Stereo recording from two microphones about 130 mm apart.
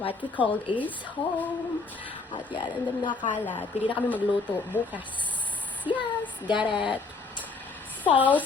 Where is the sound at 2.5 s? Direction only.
35° left (ahead or behind).